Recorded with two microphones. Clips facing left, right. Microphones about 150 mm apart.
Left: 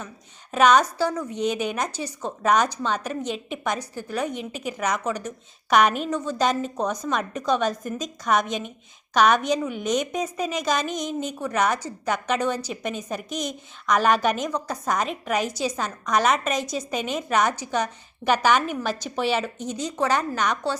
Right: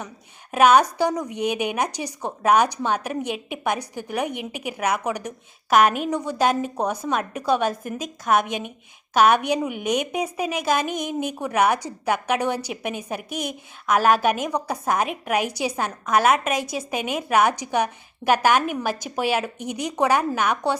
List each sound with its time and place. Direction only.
0.5 s a woman's voice: 10° right (ahead or behind)
13.3 s a woman's voice: 55° right (ahead or behind)
13.8 s a woman's voice: 5° right (ahead or behind)